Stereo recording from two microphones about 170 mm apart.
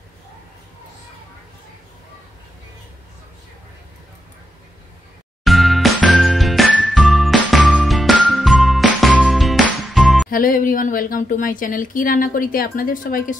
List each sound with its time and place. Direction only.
5.4 s music: centre (ahead or behind)
10.3 s a woman's voice: 55° left (ahead or behind)